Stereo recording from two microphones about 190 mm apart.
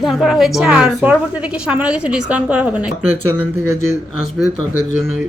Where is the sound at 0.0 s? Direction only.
Centre (ahead or behind).